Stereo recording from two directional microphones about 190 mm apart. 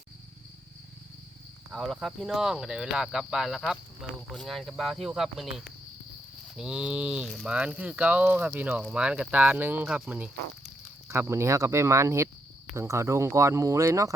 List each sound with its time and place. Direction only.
1.7 s speech: centre (ahead or behind); by 14.1 s 15° right (ahead or behind)